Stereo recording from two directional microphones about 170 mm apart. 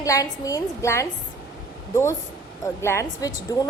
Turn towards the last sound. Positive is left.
turn(degrees=20)  # may be behind; listen again after turning